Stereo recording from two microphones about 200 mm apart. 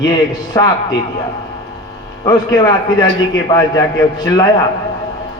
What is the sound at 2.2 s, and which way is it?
A man's voice, 20° left (ahead or behind).